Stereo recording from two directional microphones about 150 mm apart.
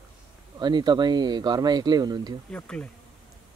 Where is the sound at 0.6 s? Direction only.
30° right (ahead or behind).